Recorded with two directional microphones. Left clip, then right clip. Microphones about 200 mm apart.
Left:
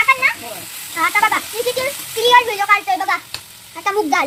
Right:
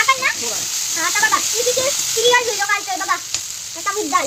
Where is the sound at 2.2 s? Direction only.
20° left (ahead or behind).